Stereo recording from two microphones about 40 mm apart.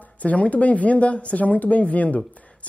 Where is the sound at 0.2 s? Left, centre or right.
Left.